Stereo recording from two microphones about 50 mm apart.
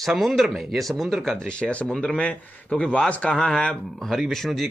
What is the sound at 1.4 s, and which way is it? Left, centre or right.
A man's voice, centre.